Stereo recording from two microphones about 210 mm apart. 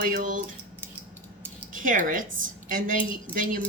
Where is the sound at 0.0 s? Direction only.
40° right (ahead or behind).